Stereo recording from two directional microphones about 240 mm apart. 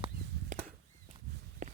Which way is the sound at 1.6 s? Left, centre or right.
Right.